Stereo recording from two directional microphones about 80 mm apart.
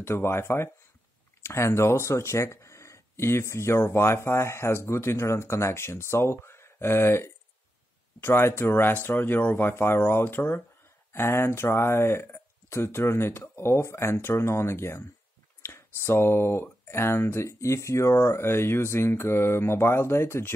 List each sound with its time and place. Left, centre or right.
0.0 s speech: left